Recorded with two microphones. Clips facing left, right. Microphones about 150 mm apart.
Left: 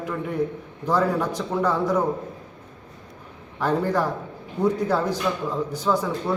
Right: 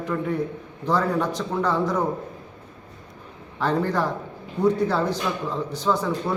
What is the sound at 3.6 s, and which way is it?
A man's voice, 10° left (ahead or behind).